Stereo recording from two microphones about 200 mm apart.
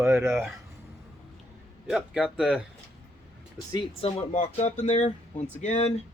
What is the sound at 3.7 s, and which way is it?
Speech, 30° left (ahead or behind).